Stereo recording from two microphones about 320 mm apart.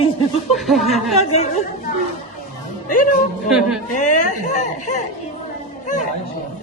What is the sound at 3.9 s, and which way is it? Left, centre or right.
Speech, left.